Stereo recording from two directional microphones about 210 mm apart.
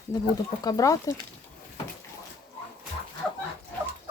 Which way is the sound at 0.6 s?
15° left (ahead or behind).